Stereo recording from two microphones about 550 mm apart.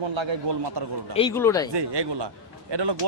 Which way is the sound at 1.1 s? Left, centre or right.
Centre.